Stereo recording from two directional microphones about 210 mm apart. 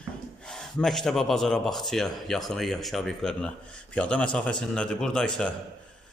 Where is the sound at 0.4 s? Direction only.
5° left (ahead or behind).